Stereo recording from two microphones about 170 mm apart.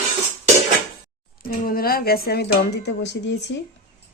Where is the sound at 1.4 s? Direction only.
60° left (ahead or behind); by 3.5 s 90° left.